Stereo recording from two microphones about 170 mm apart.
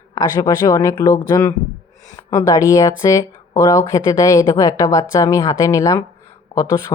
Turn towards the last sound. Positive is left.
turn(degrees=15)  # may be behind; listen again after turning